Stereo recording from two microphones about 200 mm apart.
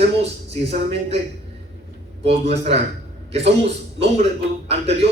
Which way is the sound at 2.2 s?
30° right (ahead or behind).